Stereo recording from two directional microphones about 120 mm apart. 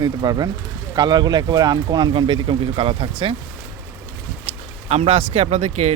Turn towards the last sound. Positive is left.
turn(degrees=-65)  # may be behind; listen again after turning